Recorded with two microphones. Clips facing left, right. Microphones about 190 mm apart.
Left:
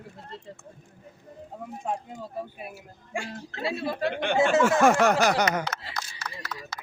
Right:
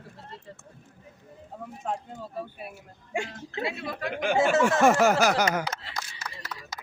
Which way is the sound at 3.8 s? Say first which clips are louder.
Left 5 dB; 30° left (ahead or behind).